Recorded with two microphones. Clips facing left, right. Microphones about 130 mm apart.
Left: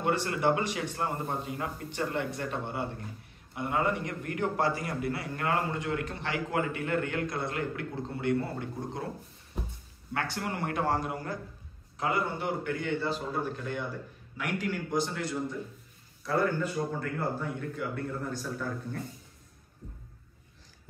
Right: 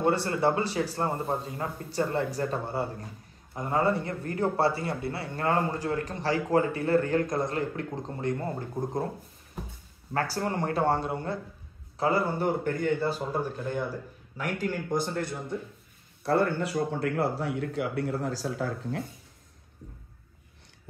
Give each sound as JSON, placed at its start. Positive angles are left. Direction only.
{"t": 0.0, "sound": "a man's voice", "side_deg": -30}
{"t": 10.1, "sound": "a man's voice", "side_deg": -35}
{"t": 14.3, "sound": "speech", "side_deg": -40}
{"t": 16.2, "sound": "a man's voice", "side_deg": -65}